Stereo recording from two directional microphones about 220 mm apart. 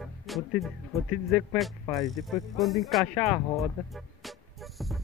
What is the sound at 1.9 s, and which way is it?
Speech, centre (ahead or behind).